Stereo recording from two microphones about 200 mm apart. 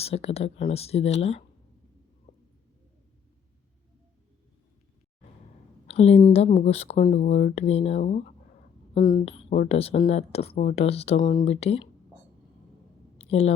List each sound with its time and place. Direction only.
0.0 s speech: 30° left (ahead or behind)
5.9 s a woman's voice: 30° left (ahead or behind)
13.1 s a sound: 30° left (ahead or behind)